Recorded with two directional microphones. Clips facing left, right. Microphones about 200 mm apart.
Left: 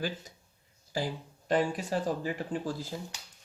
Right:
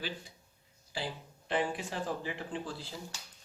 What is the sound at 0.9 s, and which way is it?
Speech, 40° left (ahead or behind).